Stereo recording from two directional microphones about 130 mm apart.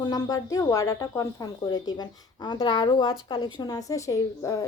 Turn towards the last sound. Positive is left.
turn(degrees=25)  # may be behind; listen again after turning